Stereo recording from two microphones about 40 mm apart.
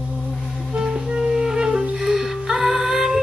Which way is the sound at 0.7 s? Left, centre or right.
Right.